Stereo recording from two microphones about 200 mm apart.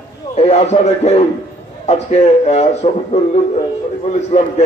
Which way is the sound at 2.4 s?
35° left (ahead or behind).